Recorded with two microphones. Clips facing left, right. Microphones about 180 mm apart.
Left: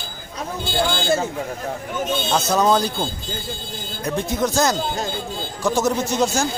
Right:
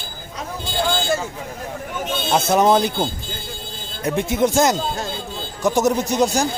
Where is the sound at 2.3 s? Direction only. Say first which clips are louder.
Right 3 dB; 25° right (ahead or behind).